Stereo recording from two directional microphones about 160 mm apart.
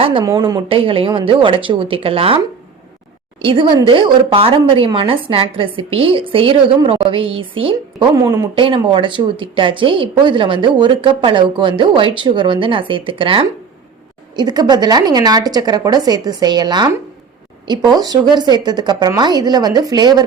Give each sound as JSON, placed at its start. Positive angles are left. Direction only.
{"t": 0.0, "sound": "a woman's voice", "side_deg": -35}
{"t": 3.4, "sound": "a woman's voice", "side_deg": -30}
{"t": 8.1, "sound": "a woman's voice", "side_deg": -20}
{"t": 8.5, "sound": "a woman's voice", "side_deg": -30}